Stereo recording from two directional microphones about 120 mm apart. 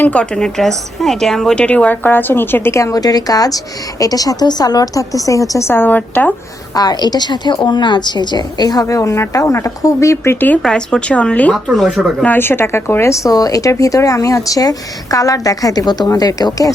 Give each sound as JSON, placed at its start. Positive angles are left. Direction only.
{"t": 0.0, "sound": "a woman's voice", "side_deg": 10}
{"t": 6.7, "sound": "a woman's voice", "side_deg": 35}
{"t": 11.5, "sound": "speech", "side_deg": 0}
{"t": 12.2, "sound": "a woman's voice", "side_deg": 15}